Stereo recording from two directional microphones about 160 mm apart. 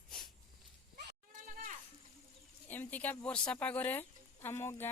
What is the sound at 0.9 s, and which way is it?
Sheep, 60° right (ahead or behind).